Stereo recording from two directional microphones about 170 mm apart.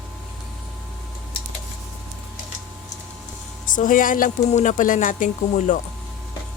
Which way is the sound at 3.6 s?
50° left (ahead or behind).